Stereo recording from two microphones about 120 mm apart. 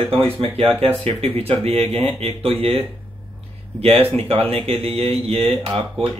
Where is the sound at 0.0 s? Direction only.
50° right (ahead or behind).